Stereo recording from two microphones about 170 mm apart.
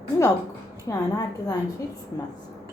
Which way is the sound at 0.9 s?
20° left (ahead or behind).